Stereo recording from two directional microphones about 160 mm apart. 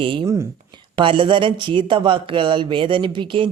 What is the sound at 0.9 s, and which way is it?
Speech, 30° right (ahead or behind).